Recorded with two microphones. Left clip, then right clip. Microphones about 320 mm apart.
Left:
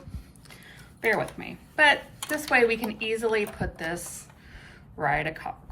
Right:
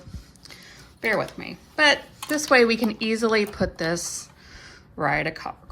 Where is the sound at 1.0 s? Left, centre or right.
Centre.